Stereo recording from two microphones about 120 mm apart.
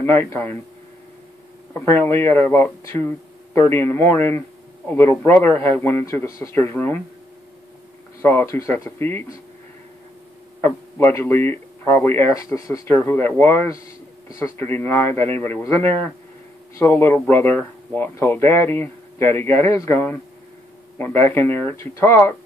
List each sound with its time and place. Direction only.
0.0 s speech: 20° left (ahead or behind)
1.7 s speech: 20° left (ahead or behind)
8.2 s speech: 20° left (ahead or behind)
10.6 s speech: 20° left (ahead or behind)
12.9 s speech: 20° left (ahead or behind)